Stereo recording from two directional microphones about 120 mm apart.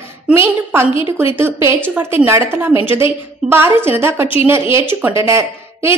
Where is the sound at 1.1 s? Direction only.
20° right (ahead or behind).